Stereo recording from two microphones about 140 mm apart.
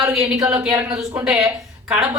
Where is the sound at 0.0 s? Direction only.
5° right (ahead or behind).